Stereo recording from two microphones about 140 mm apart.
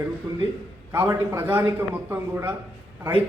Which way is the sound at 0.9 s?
20° right (ahead or behind).